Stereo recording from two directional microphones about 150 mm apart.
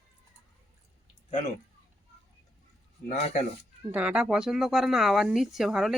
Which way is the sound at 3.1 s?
50° left (ahead or behind).